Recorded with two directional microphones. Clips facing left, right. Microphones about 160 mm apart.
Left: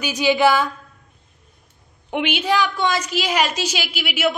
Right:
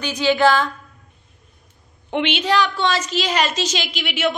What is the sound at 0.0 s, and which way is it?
Speech, 15° left (ahead or behind).